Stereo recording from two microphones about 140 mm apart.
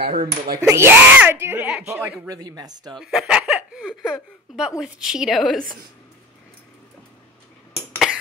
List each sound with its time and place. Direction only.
0.1 s speech: 90° right
0.6 s speech: 20° right (ahead or behind)
2.2 s speech: 25° right (ahead or behind)
3.0 s speech: 5° right (ahead or behind)